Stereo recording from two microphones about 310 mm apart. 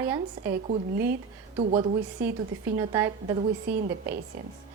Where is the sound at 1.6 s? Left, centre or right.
Centre.